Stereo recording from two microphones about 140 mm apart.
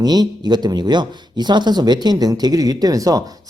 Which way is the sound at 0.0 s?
30° right (ahead or behind).